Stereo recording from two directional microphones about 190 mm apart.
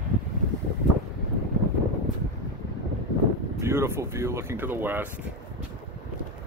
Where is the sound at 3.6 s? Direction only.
15° right (ahead or behind).